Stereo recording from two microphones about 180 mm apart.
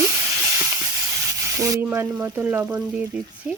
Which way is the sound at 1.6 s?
20° right (ahead or behind).